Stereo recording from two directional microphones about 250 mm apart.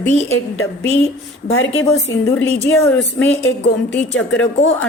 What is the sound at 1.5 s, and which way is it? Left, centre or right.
Speech, left.